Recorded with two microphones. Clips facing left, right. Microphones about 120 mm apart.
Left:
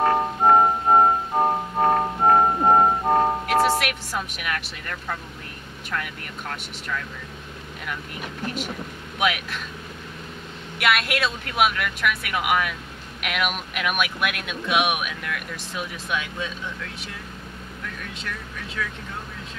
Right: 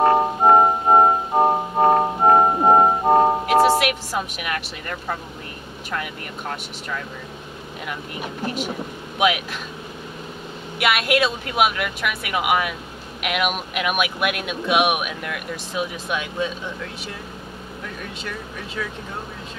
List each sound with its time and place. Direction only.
0.0 s music: 15° right (ahead or behind)
3.4 s speech: centre (ahead or behind)
10.8 s speech: 5° right (ahead or behind)
17.8 s speech: 10° right (ahead or behind)